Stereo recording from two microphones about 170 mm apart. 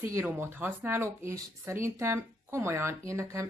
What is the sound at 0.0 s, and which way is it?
Speech, 15° right (ahead or behind).